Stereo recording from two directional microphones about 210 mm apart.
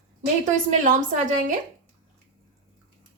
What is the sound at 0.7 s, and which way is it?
Speech, 35° right (ahead or behind).